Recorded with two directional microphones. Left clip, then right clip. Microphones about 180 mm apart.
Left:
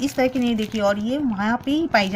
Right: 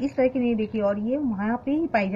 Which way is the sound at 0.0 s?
25° left (ahead or behind).